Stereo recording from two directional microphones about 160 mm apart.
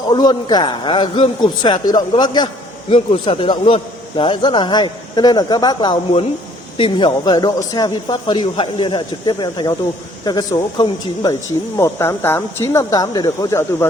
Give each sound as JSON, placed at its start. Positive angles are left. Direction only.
{"t": 0.1, "sound": "a man's voice", "side_deg": 25}